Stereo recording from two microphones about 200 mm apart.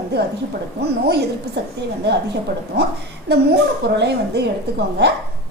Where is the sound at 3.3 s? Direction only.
55° right (ahead or behind).